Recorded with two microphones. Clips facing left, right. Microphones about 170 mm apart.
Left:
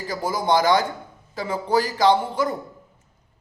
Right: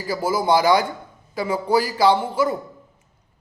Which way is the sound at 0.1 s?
10° right (ahead or behind).